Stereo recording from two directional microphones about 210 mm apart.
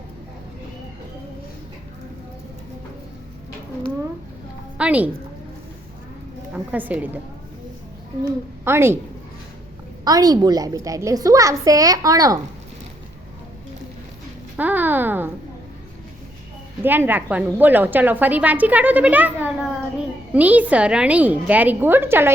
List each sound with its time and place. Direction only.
4.8 s a woman's voice: 5° right (ahead or behind)
6.5 s a woman's voice: 5° right (ahead or behind)
8.6 s a woman's voice: 10° right (ahead or behind)
10.0 s a woman's voice: 20° right (ahead or behind)
14.5 s a sound: 10° right (ahead or behind)
16.8 s a woman's voice: 10° right (ahead or behind)